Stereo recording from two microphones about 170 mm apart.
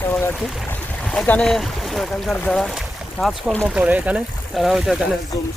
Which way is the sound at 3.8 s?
10° right (ahead or behind).